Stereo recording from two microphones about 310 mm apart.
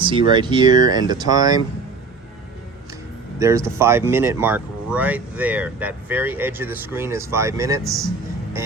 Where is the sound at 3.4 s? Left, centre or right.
Centre.